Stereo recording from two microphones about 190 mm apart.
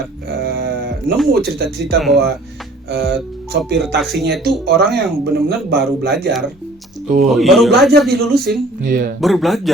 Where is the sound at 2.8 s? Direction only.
60° right (ahead or behind).